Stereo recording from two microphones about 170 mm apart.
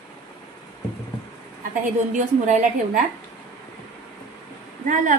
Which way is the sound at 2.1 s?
45° right (ahead or behind).